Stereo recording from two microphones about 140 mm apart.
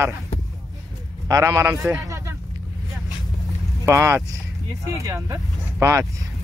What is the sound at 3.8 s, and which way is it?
Speech, 20° right (ahead or behind).